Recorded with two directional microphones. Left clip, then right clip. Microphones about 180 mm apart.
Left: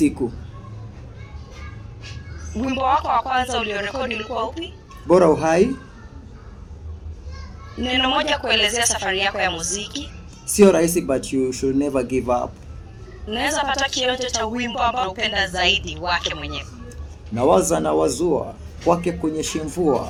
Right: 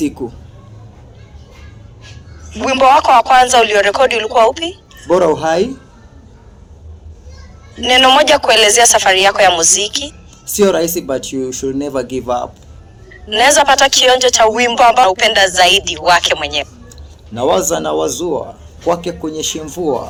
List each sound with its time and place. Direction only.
2.6 s speech: 60° right (ahead or behind)
5.0 s speech: 15° left (ahead or behind)
7.8 s speech: 60° right (ahead or behind)
10.4 s speech: 15° left (ahead or behind)
13.3 s speech: 60° right (ahead or behind)
17.3 s speech: 15° left (ahead or behind)